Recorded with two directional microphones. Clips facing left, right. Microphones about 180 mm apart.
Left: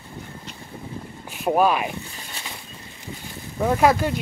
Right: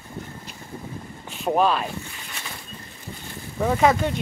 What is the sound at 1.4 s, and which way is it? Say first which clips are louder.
Speech: left 2 dB; 10° left (ahead or behind).